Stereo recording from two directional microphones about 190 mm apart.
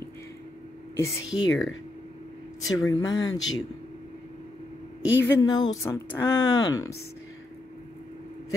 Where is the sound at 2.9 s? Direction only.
20° left (ahead or behind).